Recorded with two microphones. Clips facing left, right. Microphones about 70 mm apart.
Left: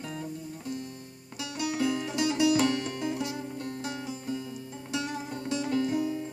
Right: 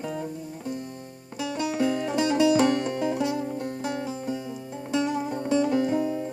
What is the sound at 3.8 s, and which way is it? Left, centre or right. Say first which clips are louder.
Music: right 6 dB; right.